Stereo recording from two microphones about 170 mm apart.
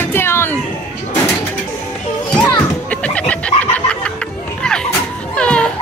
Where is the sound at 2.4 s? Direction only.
20° left (ahead or behind).